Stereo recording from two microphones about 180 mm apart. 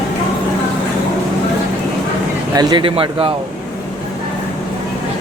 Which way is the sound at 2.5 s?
25° right (ahead or behind).